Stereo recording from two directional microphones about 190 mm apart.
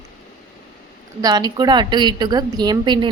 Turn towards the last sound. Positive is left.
turn(degrees=-25)  # may be behind; listen again after turning